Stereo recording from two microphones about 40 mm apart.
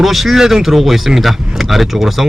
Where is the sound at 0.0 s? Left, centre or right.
Centre.